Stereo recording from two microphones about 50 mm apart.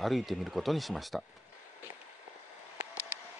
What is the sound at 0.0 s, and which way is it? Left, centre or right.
Speech, centre.